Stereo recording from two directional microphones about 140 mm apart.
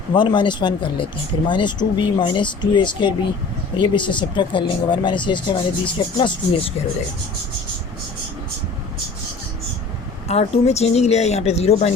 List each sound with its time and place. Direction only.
0.1 s speech: 35° left (ahead or behind)
10.2 s speech: 50° left (ahead or behind)